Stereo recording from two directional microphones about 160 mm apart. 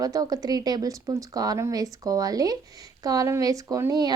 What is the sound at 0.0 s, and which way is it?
Speech, 25° right (ahead or behind).